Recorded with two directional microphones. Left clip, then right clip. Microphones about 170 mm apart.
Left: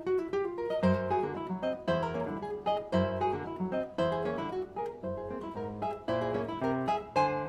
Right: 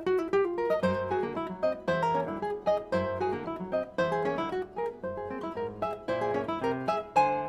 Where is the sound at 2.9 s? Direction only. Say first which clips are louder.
Right 1 dB; centre (ahead or behind).